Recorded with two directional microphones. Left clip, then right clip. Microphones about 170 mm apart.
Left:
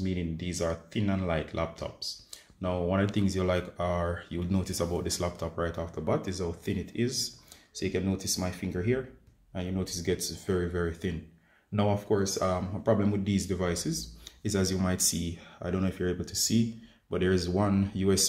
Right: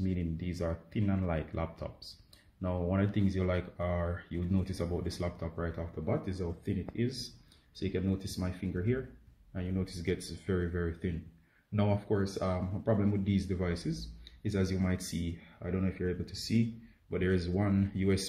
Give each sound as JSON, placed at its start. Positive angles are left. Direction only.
{"t": 0.0, "sound": "speech", "side_deg": 0}